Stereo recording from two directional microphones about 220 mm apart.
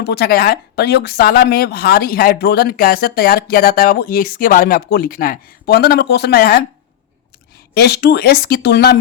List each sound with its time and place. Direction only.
0.0 s a woman's voice: 50° left (ahead or behind)
7.7 s a woman's voice: 50° left (ahead or behind)